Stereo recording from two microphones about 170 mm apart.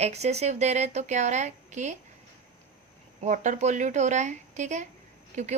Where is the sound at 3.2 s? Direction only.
45° right (ahead or behind).